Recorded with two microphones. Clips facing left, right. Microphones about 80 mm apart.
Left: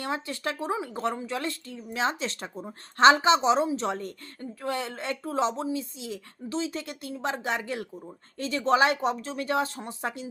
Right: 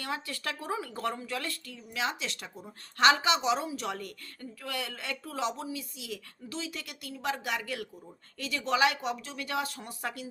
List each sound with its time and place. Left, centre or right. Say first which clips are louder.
0.0 s speech: left 5 dB; left